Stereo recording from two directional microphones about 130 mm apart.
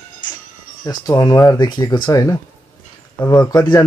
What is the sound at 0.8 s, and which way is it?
Speech, 30° left (ahead or behind).